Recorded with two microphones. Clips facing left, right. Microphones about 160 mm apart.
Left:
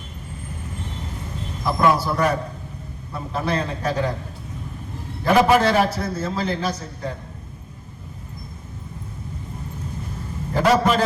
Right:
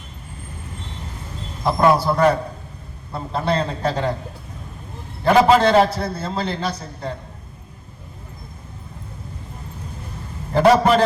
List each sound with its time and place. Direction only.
1.8 s a man's voice: 30° right (ahead or behind)
5.2 s a man's voice: 30° right (ahead or behind)
10.7 s a sound: 35° right (ahead or behind)